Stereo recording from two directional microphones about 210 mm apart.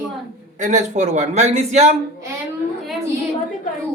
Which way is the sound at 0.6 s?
35° right (ahead or behind).